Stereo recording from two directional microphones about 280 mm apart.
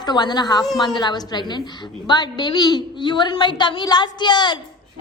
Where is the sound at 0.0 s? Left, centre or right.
Centre.